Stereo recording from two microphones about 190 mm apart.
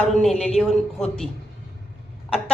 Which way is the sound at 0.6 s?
5° left (ahead or behind).